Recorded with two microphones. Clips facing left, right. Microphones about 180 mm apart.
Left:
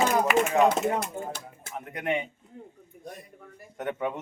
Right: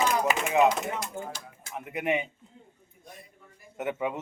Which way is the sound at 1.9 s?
5° right (ahead or behind).